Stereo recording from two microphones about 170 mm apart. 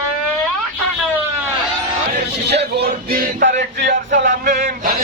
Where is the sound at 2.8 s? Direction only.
60° right (ahead or behind).